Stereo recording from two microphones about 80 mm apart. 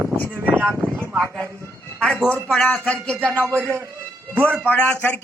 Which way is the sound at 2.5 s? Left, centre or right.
Centre.